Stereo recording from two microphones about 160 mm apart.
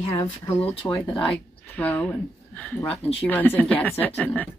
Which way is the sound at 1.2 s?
10° left (ahead or behind).